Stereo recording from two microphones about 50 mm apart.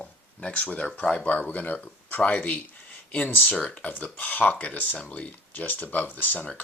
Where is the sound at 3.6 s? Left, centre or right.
Left.